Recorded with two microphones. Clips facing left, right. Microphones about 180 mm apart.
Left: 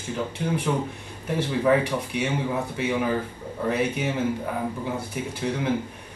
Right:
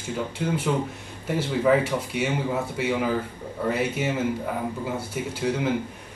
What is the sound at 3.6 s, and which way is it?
Speech, 5° right (ahead or behind).